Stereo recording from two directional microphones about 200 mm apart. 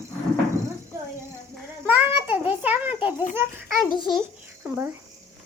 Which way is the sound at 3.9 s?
25° left (ahead or behind).